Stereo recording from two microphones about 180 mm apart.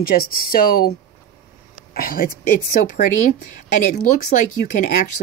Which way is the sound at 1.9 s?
55° left (ahead or behind).